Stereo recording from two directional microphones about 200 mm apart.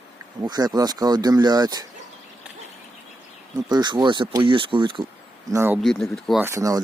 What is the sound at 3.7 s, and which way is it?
Speech, 20° right (ahead or behind).